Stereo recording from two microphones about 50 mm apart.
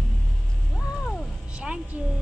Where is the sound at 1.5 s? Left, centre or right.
Right.